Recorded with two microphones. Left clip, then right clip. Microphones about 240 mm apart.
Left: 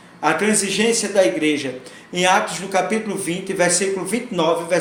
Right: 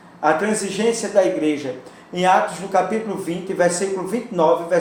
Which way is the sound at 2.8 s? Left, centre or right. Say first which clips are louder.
Right 1 dB; left.